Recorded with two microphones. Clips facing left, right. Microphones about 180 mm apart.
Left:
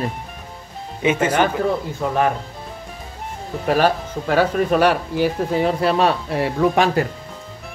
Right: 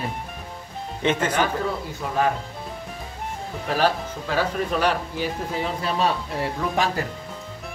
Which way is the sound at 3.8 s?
60° left (ahead or behind).